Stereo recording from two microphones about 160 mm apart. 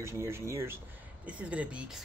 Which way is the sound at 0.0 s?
15° right (ahead or behind).